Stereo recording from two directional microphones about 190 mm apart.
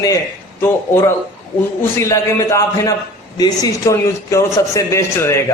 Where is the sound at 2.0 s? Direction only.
15° left (ahead or behind).